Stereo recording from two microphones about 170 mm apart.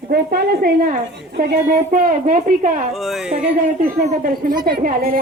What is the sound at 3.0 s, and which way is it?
Speech, centre (ahead or behind).